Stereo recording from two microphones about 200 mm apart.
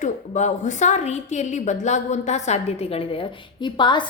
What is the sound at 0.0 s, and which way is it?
A woman's voice, 35° left (ahead or behind).